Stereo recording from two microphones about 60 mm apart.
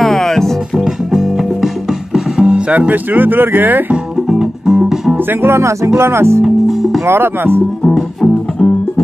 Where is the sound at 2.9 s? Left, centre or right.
Right.